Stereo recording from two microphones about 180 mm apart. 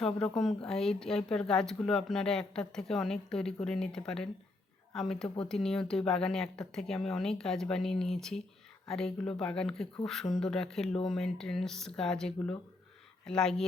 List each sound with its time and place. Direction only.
0.0 s speech: centre (ahead or behind)